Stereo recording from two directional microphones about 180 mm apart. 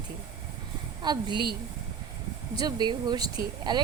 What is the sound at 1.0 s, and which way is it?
Speech, 25° right (ahead or behind).